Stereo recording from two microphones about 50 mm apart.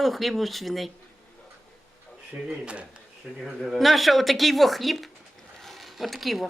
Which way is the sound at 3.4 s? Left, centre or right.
Centre.